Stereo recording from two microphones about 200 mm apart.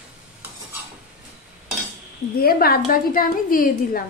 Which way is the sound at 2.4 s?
50° left (ahead or behind).